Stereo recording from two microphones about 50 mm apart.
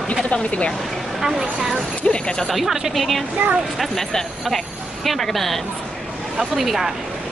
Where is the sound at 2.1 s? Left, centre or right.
Centre.